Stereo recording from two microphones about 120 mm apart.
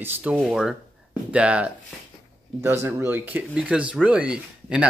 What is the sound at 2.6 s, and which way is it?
Speech, 20° right (ahead or behind).